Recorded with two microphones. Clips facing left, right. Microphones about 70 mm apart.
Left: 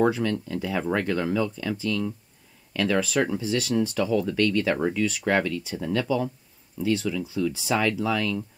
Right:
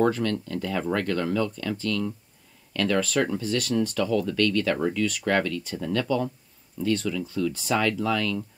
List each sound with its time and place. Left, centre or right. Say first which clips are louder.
0.0 s speech: even; centre